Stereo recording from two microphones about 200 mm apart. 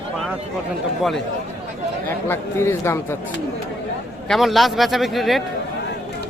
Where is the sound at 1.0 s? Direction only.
Centre (ahead or behind).